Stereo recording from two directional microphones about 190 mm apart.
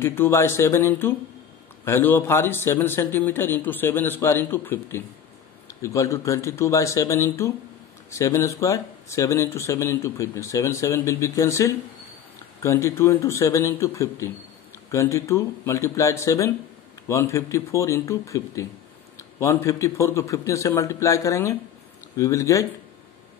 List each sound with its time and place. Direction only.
0.0 s speech: 10° left (ahead or behind)